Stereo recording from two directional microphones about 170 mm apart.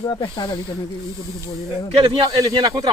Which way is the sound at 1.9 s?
35° right (ahead or behind).